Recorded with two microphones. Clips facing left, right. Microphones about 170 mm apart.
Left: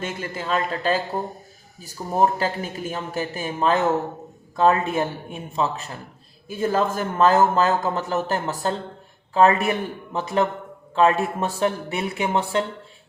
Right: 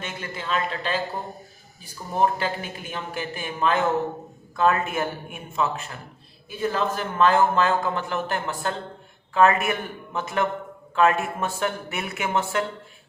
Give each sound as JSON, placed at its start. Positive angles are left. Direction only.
{"t": 0.0, "sound": "speech", "side_deg": 40}